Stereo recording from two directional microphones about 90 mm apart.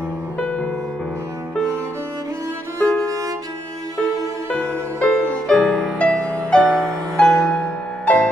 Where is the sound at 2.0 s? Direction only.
30° right (ahead or behind).